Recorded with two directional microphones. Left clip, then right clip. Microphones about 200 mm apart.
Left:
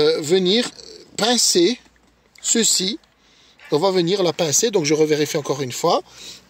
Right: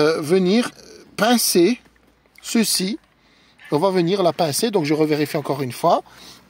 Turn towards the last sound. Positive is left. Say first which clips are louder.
# right 1 dB
turn(degrees=-45)  # may be behind; listen again after turning